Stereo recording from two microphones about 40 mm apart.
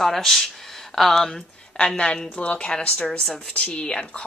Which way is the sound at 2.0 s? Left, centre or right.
Left.